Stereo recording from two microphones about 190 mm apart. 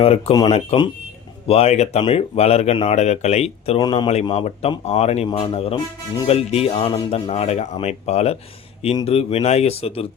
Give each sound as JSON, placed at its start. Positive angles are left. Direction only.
{"t": 0.0, "sound": "speech", "side_deg": 30}
{"t": 3.8, "sound": "speech", "side_deg": 25}